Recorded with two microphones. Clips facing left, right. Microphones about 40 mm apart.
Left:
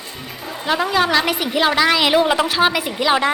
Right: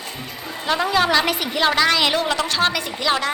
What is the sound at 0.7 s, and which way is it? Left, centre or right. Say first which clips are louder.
A woman's voice: left 1 dB; centre.